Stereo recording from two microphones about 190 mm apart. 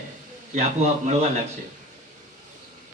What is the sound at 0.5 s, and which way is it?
Speech, 35° right (ahead or behind).